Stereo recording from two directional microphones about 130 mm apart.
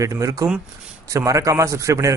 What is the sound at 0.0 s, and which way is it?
Speech, 25° right (ahead or behind).